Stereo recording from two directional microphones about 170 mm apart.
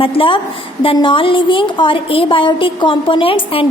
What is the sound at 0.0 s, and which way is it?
A woman's voice, 30° left (ahead or behind).